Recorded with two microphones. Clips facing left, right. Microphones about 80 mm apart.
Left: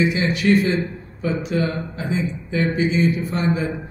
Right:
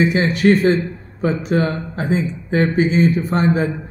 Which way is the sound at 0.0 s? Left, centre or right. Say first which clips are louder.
Right 4 dB; right.